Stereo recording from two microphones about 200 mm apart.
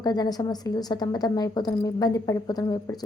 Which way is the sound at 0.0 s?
20° left (ahead or behind).